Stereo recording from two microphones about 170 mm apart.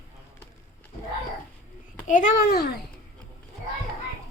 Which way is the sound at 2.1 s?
50° left (ahead or behind).